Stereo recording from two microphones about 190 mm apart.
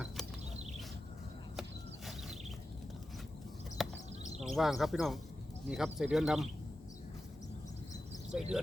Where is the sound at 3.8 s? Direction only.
Centre (ahead or behind).